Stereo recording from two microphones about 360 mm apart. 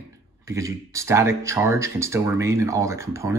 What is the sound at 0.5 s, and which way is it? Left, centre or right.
Speech, centre.